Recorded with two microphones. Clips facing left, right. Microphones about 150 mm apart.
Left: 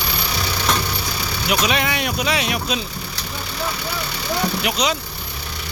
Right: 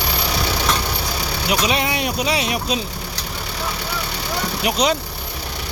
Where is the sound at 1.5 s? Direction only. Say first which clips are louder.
Even; 25° right (ahead or behind).